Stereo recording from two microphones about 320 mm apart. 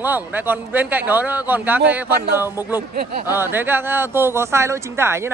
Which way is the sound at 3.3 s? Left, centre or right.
Centre.